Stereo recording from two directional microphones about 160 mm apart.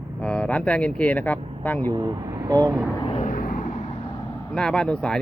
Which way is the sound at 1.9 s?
25° right (ahead or behind).